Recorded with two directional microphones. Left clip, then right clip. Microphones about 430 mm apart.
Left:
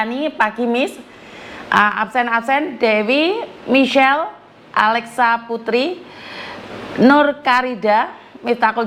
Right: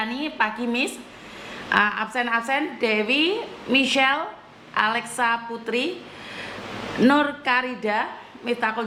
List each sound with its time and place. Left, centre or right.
0.0 s a woman's voice: centre
7.0 s a woman's voice: centre